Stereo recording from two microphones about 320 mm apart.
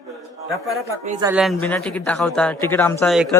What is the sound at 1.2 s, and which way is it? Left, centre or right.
A man's voice, centre.